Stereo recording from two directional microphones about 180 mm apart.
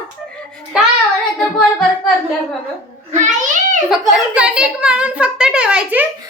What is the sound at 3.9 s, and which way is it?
A woman's voice, 5° right (ahead or behind).